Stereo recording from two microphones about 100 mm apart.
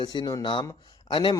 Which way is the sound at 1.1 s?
55° left (ahead or behind).